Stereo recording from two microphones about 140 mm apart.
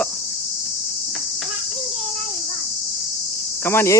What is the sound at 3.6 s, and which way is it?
Speech, 20° left (ahead or behind).